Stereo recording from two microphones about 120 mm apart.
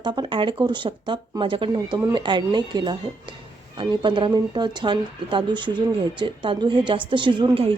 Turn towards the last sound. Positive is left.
turn(degrees=-45)  # may be behind; listen again after turning